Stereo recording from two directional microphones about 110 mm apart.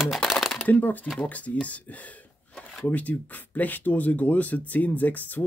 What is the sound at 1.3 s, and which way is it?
Speech, 15° left (ahead or behind).